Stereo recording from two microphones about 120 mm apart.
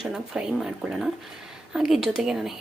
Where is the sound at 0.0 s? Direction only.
5° right (ahead or behind).